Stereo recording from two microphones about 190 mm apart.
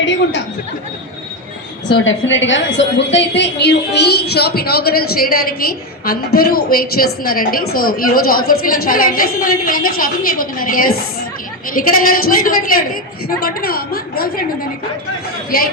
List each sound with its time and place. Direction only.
0.0 s speech: 70° left (ahead or behind)
2.0 s a woman's voice: 75° left (ahead or behind); by 14.4 s 50° left (ahead or behind)
15.4 s a woman's voice: 50° left (ahead or behind)